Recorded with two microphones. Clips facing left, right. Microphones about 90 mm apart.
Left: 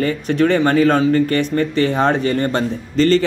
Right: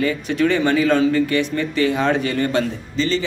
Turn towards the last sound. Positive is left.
turn(degrees=55)  # may be behind; listen again after turning